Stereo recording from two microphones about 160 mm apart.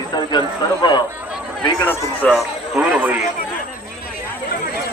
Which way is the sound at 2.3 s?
5° right (ahead or behind).